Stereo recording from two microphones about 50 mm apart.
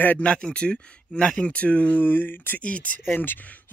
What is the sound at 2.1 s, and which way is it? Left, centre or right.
Speech, left.